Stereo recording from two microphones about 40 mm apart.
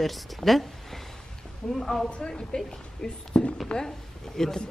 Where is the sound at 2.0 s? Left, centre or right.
Left.